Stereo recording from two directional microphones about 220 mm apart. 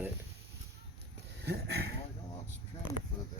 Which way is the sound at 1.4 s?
50° right (ahead or behind).